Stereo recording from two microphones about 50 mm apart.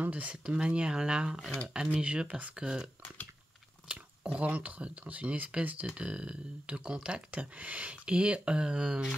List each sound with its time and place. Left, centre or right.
0.0 s speech: right
3.9 s speech: right